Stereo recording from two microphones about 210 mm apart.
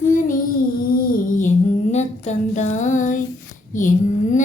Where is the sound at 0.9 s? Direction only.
40° left (ahead or behind).